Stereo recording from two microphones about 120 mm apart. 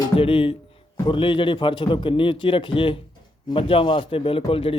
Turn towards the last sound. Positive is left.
turn(degrees=50)  # may be behind; listen again after turning